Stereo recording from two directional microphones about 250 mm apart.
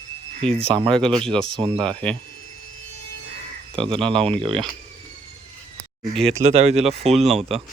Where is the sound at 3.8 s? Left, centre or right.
Right.